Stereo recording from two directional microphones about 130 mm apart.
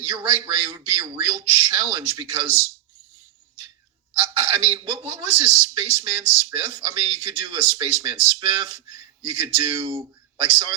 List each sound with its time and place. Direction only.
0.3 s speech: 50° right (ahead or behind)
4.2 s speech: 50° right (ahead or behind)